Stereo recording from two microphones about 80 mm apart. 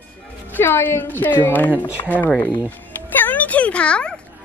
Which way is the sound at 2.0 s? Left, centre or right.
Left.